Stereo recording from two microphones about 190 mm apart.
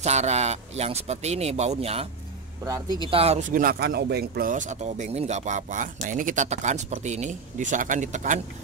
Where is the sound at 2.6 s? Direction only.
20° right (ahead or behind).